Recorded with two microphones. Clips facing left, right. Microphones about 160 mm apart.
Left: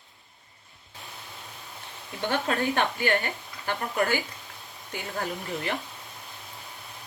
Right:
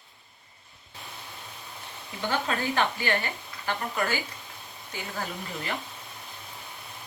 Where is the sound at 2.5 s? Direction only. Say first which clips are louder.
Left 2 dB; 50° left (ahead or behind).